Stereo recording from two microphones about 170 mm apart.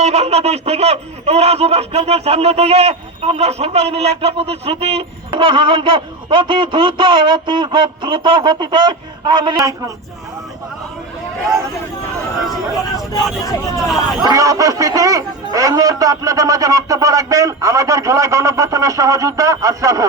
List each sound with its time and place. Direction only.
0.0 s speech: 40° right (ahead or behind); by 9.7 s 25° right (ahead or behind)
13.8 s speech: centre (ahead or behind)
14.2 s a man's voice: 20° right (ahead or behind)